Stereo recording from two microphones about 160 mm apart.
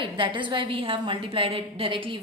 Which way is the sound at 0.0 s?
30° right (ahead or behind).